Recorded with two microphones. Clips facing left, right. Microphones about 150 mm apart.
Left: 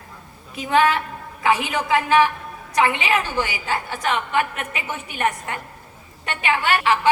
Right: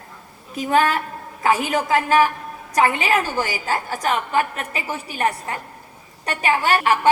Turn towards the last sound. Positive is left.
turn(degrees=-45)  # may be behind; listen again after turning